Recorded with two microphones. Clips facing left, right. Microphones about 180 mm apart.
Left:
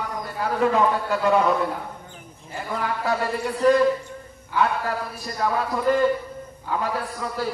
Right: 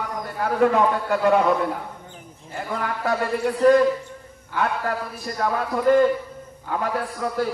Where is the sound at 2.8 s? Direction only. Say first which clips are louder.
Even; 55° right (ahead or behind).